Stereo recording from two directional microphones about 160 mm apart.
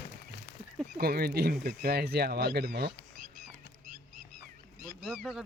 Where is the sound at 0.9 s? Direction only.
70° right (ahead or behind).